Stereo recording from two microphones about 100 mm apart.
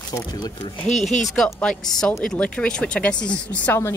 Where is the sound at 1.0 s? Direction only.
Centre (ahead or behind).